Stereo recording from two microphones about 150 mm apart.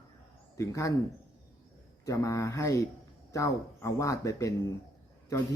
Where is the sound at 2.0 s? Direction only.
20° left (ahead or behind).